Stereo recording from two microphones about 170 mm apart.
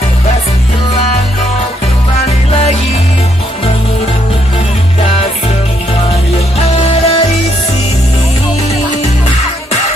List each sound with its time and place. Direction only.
6.6 s music: 35° left (ahead or behind)